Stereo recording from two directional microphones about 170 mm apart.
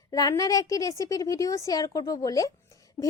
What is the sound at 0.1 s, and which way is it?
A woman's voice, 20° left (ahead or behind).